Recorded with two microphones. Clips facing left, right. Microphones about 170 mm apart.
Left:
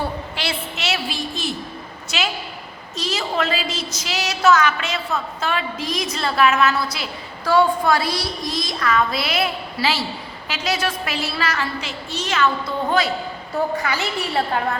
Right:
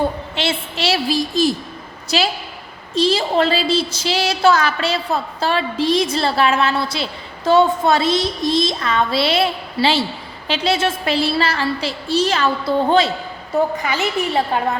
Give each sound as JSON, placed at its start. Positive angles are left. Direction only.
{"t": 0.0, "sound": "a woman's voice", "side_deg": -25}
{"t": 13.8, "sound": "a woman's voice", "side_deg": -20}